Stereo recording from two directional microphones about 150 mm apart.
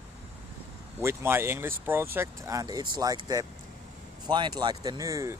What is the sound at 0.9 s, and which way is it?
Speech, 15° right (ahead or behind).